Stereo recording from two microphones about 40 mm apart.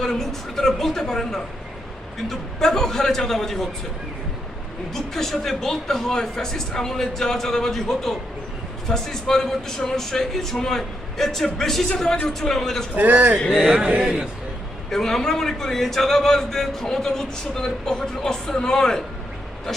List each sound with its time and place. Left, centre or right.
0.0 s a woman's voice: centre
5.1 s a man's voice: centre
13.0 s a man's voice: right
14.8 s a man's voice: centre